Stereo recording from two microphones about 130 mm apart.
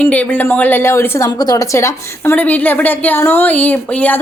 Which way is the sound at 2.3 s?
10° left (ahead or behind).